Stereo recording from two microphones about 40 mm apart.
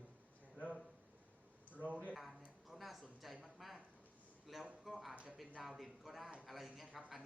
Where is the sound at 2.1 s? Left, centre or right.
Centre.